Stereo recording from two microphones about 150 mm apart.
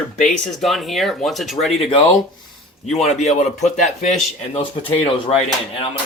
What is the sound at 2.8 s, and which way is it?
Speech, 50° left (ahead or behind).